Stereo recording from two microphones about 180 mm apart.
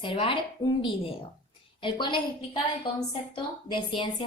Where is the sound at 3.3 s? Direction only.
25° left (ahead or behind).